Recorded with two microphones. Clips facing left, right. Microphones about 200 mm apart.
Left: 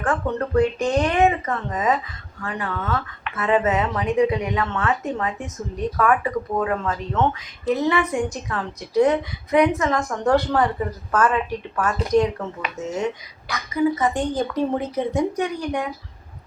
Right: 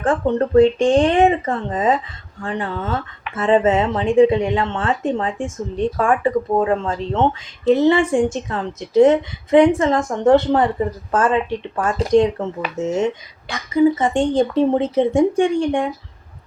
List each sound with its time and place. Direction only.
0.0 s speech: 25° right (ahead or behind)